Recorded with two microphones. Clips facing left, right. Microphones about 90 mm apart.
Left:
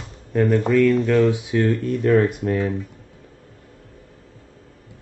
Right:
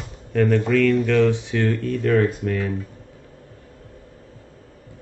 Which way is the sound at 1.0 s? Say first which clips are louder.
Left 1 dB; 20° left (ahead or behind).